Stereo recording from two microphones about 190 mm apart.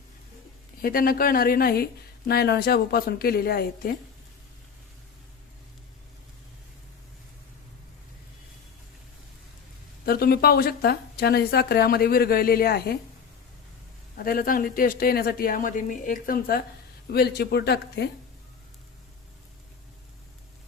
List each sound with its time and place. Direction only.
0.8 s speech: 50° left (ahead or behind)
10.1 s speech: 55° left (ahead or behind)
14.2 s speech: 50° left (ahead or behind)